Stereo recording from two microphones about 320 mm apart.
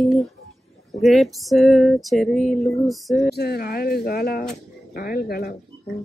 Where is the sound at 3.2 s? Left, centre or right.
Left.